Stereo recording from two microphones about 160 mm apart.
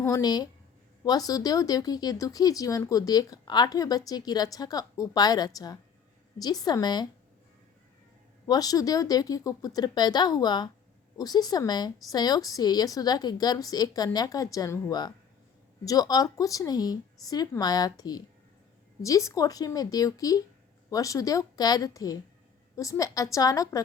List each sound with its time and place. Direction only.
0.0 s speech: 25° left (ahead or behind)
8.4 s speech: 25° left (ahead or behind)